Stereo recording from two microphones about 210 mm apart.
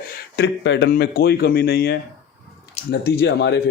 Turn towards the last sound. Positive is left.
turn(degrees=55)  # may be behind; listen again after turning